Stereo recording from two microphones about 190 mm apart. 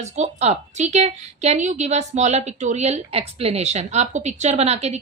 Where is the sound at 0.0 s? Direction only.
35° right (ahead or behind).